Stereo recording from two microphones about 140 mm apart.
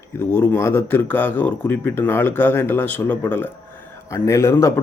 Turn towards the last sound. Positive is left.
turn(degrees=20)  # may be behind; listen again after turning